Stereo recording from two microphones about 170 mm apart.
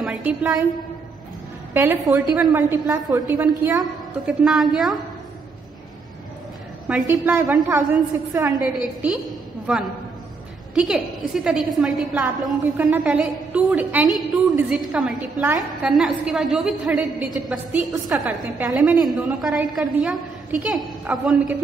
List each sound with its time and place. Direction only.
0.0 s a woman's voice: 5° right (ahead or behind)
1.7 s a woman's voice: 15° right (ahead or behind)
3.8 s a woman's voice: centre (ahead or behind)
6.9 s a woman's voice: 10° right (ahead or behind)
9.7 s a woman's voice: 5° right (ahead or behind)